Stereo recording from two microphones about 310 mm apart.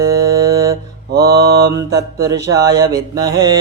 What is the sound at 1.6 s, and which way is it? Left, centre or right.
Mantra, centre.